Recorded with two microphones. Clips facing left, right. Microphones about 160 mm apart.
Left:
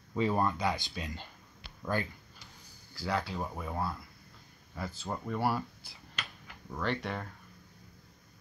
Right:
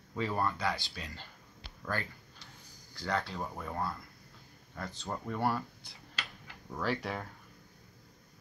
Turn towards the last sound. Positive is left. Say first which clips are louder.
# even
turn(degrees=-5)  # may be behind; listen again after turning